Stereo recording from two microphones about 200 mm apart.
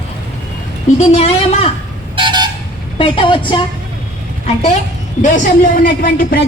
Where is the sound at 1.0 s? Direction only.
35° left (ahead or behind).